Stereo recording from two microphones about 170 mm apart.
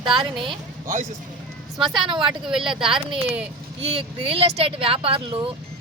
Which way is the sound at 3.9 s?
35° right (ahead or behind).